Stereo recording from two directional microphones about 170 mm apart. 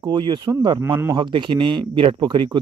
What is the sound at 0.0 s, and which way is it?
Speech, 25° right (ahead or behind).